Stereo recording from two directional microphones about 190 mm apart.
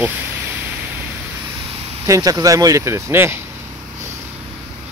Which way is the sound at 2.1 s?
20° right (ahead or behind).